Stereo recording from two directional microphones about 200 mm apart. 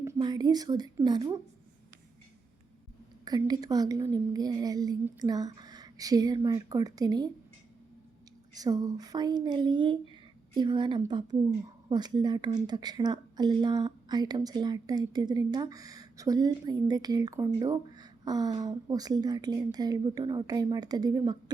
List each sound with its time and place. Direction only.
0.2 s a woman's voice: 20° right (ahead or behind)
3.2 s a woman's voice: 20° right (ahead or behind)
8.5 s a woman's voice: 20° right (ahead or behind)